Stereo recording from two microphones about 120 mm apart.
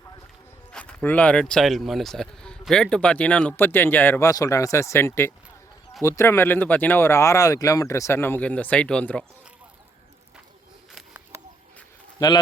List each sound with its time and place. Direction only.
0.7 s speech: 10° left (ahead or behind)
4.3 s speech: 30° left (ahead or behind); by 9.2 s 10° left (ahead or behind)
12.2 s speech: 35° left (ahead or behind)